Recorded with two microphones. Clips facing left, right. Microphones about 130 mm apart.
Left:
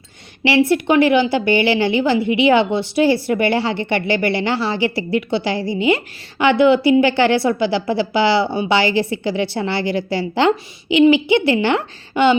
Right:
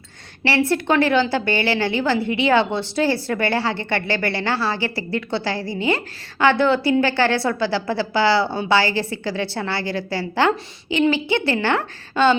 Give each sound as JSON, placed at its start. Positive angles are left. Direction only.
{"t": 0.7, "sound": "a woman's voice", "side_deg": 15}